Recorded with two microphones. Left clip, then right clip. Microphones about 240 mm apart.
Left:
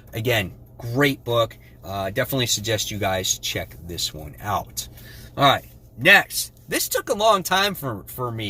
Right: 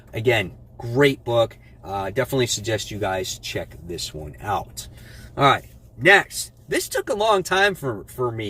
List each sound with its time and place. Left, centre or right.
0.1 s speech: centre